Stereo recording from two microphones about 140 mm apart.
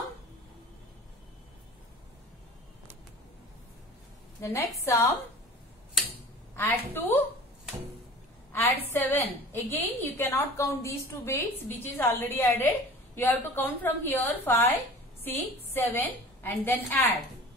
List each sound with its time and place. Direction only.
4.4 s a woman's voice: 20° left (ahead or behind)
6.5 s a woman's voice: 15° left (ahead or behind)
8.9 s a woman's voice: 15° left (ahead or behind)